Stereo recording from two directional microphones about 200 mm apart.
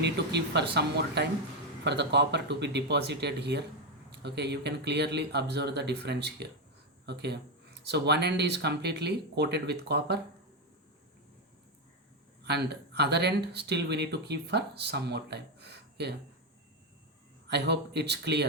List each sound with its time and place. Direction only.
0.0 s speech: 55° right (ahead or behind)
12.4 s speech: 55° right (ahead or behind)
17.5 s speech: 55° right (ahead or behind)